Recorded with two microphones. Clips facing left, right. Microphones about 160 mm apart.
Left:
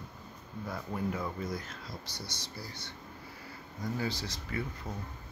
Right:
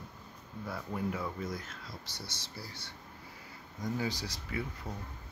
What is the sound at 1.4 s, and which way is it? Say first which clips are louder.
Speech: left 2 dB; centre (ahead or behind).